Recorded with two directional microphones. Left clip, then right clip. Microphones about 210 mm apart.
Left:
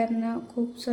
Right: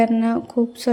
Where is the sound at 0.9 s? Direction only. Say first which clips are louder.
Right 10 dB; 35° right (ahead or behind).